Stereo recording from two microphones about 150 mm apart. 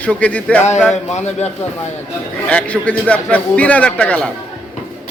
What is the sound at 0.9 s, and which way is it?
Speech, 50° left (ahead or behind).